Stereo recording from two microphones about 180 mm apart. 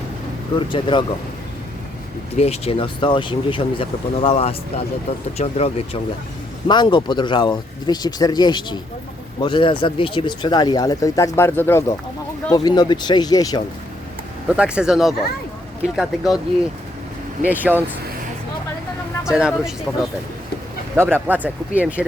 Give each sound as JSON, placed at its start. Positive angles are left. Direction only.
{"t": 0.7, "sound": "speech", "side_deg": 25}
{"t": 2.3, "sound": "speech", "side_deg": 35}
{"t": 6.7, "sound": "speech", "side_deg": 25}
{"t": 14.4, "sound": "speech", "side_deg": -5}
{"t": 17.4, "sound": "speech", "side_deg": -10}
{"t": 19.2, "sound": "speech", "side_deg": -5}
{"t": 20.9, "sound": "speech", "side_deg": -10}